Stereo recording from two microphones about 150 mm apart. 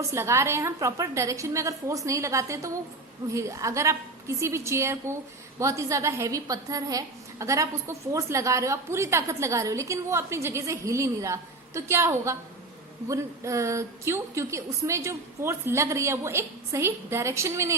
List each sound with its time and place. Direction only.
0.0 s a woman's voice: 20° right (ahead or behind)